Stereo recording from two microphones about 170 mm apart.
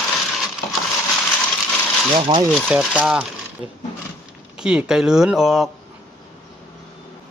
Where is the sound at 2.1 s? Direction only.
30° right (ahead or behind).